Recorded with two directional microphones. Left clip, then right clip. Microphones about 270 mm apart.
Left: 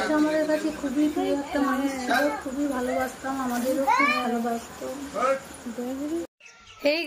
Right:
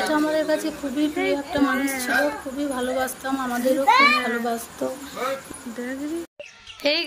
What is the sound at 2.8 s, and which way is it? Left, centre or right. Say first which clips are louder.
Speech: right 2 dB; right.